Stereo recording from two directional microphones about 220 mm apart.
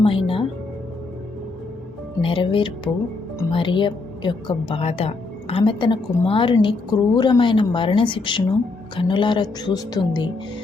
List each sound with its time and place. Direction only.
0.0 s speech: 25° left (ahead or behind)
2.2 s a woman's voice: 25° left (ahead or behind)